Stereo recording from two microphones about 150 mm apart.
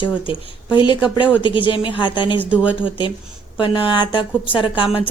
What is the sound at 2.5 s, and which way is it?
Speech, 10° right (ahead or behind).